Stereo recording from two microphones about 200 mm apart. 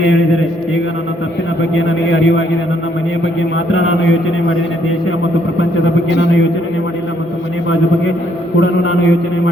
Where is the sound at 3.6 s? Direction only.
80° left.